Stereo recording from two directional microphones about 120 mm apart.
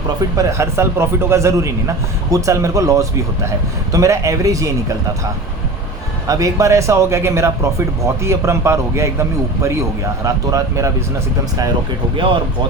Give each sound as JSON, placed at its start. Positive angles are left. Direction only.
{"t": 0.3, "sound": "a man's voice", "side_deg": -25}
{"t": 6.2, "sound": "a man's voice", "side_deg": -25}
{"t": 10.2, "sound": "a man's voice", "side_deg": -30}
{"t": 12.1, "sound": "speech", "side_deg": -45}